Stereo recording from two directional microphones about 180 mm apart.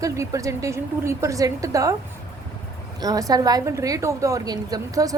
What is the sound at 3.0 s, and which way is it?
A woman's voice, 20° right (ahead or behind).